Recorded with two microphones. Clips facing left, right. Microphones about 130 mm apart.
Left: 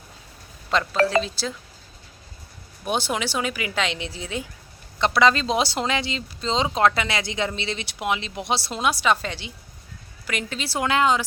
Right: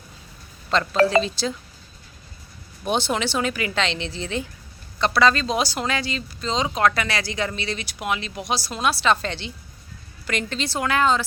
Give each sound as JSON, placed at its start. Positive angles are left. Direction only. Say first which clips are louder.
{"t": 0.9, "sound": "speech", "louder": "right 4 dB", "side_deg": 0}
{"t": 2.8, "sound": "speech", "louder": "right 2 dB", "side_deg": 5}
{"t": 4.9, "sound": "speech", "louder": "even", "side_deg": 20}
{"t": 10.8, "sound": "speech", "louder": "even", "side_deg": 20}